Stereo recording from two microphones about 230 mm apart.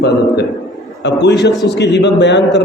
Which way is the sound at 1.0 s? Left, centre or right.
Left.